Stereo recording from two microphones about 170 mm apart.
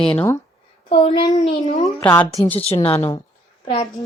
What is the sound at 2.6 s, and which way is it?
Speech, 35° left (ahead or behind).